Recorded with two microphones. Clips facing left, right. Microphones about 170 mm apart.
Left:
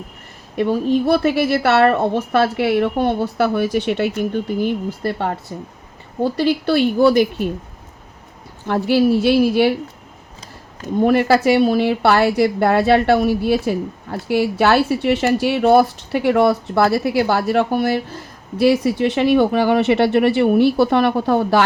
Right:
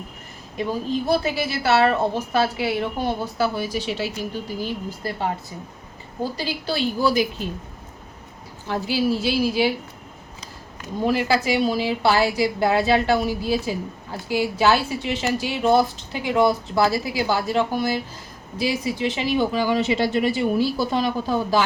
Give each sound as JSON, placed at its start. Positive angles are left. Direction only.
{"t": 0.5, "sound": "speech", "side_deg": 60}
{"t": 8.6, "sound": "speech", "side_deg": 60}
{"t": 11.0, "sound": "speech", "side_deg": 55}